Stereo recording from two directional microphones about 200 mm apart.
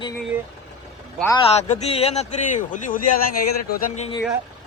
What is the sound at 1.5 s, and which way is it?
A man's voice, 35° left (ahead or behind).